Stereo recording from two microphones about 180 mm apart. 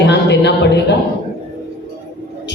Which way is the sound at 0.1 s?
75° left (ahead or behind).